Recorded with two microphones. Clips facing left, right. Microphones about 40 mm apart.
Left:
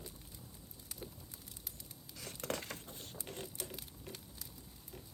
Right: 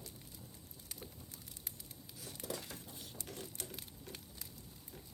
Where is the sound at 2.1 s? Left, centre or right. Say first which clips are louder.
Left 4 dB; left.